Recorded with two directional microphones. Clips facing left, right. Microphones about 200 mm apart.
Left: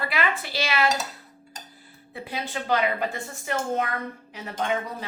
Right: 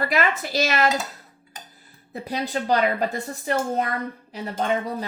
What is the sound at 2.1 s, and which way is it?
A woman's voice, 40° right (ahead or behind).